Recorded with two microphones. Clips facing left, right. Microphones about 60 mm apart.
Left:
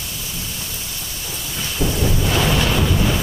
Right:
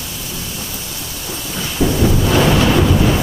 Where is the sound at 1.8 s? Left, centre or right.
Right.